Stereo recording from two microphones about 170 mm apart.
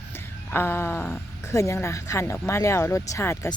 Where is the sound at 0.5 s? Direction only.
15° left (ahead or behind).